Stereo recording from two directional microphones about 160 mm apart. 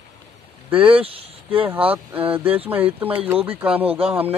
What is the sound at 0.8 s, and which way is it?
Speech, 35° right (ahead or behind).